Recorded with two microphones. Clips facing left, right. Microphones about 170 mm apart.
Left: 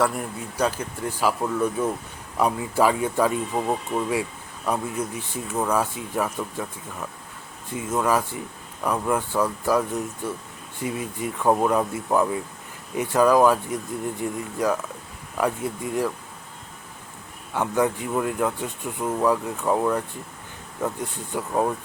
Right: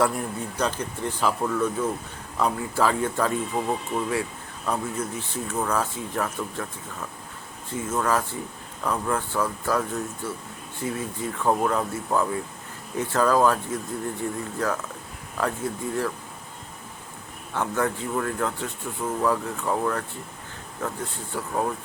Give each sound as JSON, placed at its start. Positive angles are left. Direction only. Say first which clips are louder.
{"t": 0.5, "sound": "speech", "louder": "left 4 dB", "side_deg": 5}
{"t": 7.7, "sound": "speech", "louder": "left 2 dB", "side_deg": 15}
{"t": 17.5, "sound": "speech", "louder": "left 3 dB", "side_deg": 15}